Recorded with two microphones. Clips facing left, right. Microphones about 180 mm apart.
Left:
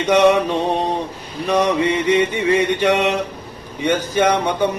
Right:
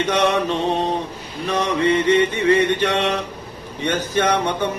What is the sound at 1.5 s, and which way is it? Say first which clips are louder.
A man's voice: left 2 dB; 10° left (ahead or behind).